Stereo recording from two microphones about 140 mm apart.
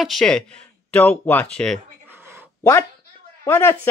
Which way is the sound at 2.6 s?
20° left (ahead or behind).